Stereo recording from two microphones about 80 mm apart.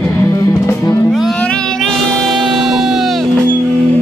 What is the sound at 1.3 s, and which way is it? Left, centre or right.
Cat, centre.